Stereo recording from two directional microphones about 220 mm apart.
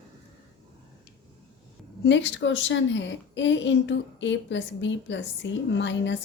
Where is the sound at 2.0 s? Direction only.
55° left (ahead or behind).